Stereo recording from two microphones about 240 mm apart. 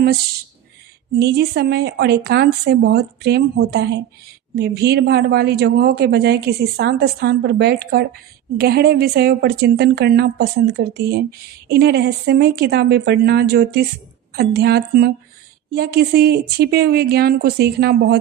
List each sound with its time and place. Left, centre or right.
1.1 s speech: right